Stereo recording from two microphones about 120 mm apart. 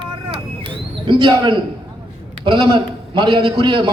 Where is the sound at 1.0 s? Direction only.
40° right (ahead or behind).